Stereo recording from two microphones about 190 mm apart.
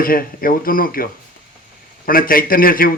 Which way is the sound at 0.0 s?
50° left (ahead or behind).